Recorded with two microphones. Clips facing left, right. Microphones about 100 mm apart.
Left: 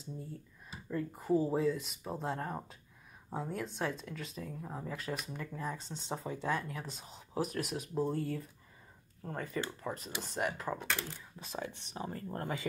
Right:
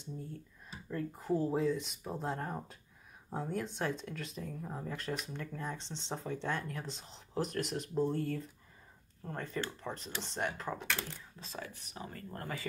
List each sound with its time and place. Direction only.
0.8 s speech: centre (ahead or behind); by 12.6 s 25° left (ahead or behind)